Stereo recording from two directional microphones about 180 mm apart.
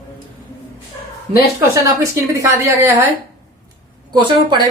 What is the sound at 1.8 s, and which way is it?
Speech, 20° right (ahead or behind).